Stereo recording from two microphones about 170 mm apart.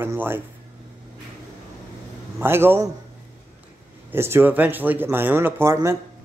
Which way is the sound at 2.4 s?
15° right (ahead or behind).